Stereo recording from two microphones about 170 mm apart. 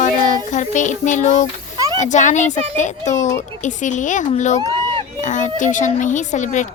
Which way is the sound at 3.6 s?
45° left (ahead or behind).